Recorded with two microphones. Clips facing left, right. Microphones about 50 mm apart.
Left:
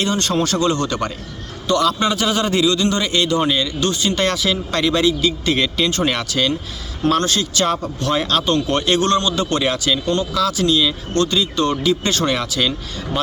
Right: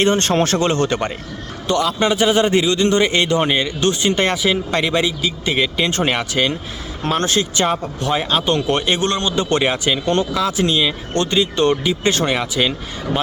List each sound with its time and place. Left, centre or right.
0.0 s speech: right; by 12.7 s centre